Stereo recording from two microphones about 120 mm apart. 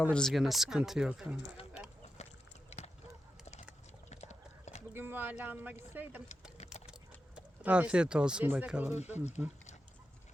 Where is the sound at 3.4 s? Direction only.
70° left (ahead or behind).